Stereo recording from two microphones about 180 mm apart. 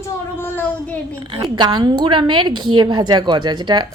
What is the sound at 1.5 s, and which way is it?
A woman's voice, 25° right (ahead or behind).